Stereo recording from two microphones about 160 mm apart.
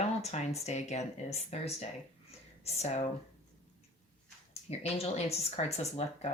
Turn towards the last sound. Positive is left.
turn(degrees=40)  # may be behind; listen again after turning